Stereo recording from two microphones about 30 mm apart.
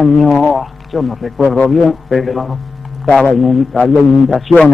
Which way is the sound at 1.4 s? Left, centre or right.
Left.